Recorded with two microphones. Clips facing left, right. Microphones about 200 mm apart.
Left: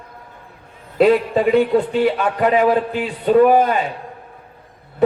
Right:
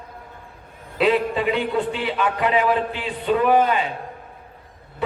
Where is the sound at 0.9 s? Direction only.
45° left (ahead or behind).